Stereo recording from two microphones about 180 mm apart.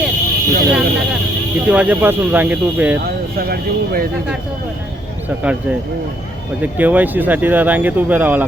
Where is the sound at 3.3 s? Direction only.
55° right (ahead or behind).